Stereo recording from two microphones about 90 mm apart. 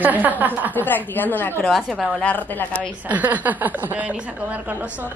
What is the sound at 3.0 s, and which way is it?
A woman's voice, 20° right (ahead or behind).